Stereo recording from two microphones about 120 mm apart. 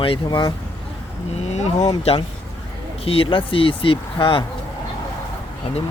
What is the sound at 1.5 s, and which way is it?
Speech, 70° left (ahead or behind).